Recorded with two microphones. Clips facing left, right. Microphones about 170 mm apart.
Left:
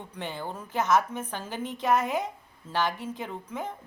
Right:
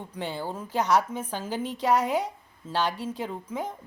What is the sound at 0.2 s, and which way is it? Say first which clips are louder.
Speech: right 3 dB; 10° right (ahead or behind).